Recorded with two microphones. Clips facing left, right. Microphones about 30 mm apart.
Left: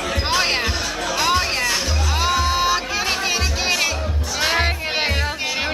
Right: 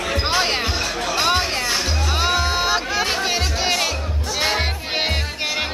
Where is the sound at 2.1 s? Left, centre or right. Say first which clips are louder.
Even; right.